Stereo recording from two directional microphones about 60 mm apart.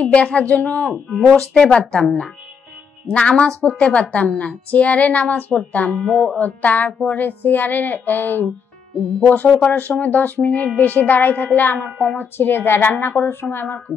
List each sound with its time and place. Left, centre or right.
0.0 s a woman's voice: centre; by 13.7 s left